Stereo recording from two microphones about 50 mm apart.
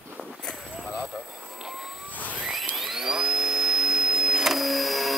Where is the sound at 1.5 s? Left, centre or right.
Centre.